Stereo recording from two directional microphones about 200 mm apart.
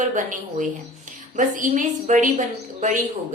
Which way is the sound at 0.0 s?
40° right (ahead or behind).